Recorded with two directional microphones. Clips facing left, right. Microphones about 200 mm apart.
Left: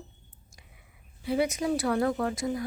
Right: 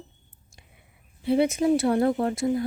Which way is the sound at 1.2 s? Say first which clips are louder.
Right 6 dB; 25° right (ahead or behind).